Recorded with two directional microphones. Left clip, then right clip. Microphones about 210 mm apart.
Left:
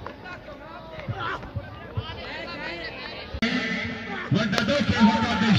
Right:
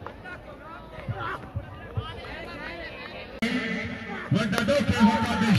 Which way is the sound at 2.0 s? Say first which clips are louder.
Left 3 dB; 20° right (ahead or behind).